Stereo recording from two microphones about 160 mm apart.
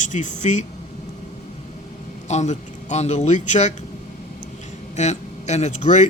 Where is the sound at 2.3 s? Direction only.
45° left (ahead or behind).